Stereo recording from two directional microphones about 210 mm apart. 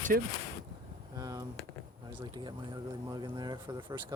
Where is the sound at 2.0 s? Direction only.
20° right (ahead or behind).